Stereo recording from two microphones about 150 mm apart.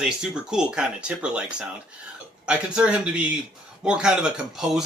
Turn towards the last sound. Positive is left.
turn(degrees=0)  # may be behind; listen again after turning